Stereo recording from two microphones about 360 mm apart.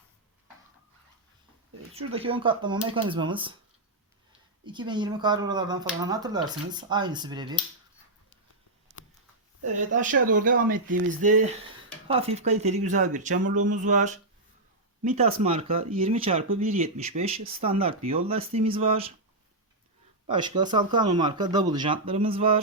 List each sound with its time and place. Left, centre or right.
1.9 s speech: centre
4.6 s speech: centre
9.7 s speech: right
20.3 s speech: centre